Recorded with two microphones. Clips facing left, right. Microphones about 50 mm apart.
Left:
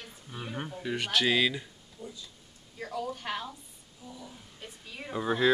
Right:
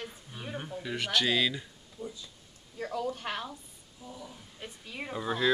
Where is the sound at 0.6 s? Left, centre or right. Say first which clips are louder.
Left 1 dB; centre.